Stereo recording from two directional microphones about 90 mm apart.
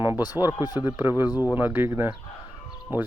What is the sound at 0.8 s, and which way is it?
Speech, 25° right (ahead or behind).